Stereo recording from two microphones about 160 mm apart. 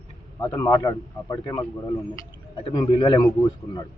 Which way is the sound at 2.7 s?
30° left (ahead or behind).